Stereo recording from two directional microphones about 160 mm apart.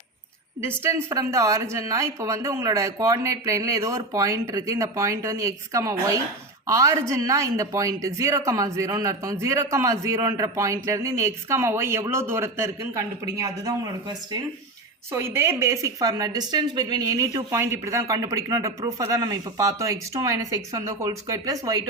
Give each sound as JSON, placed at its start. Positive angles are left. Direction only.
{"t": 0.8, "sound": "speech", "side_deg": -15}